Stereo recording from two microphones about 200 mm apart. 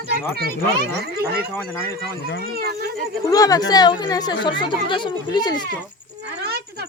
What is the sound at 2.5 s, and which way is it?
Speech, 50° right (ahead or behind).